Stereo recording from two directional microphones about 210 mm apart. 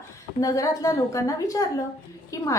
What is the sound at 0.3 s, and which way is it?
A woman's voice, 15° left (ahead or behind).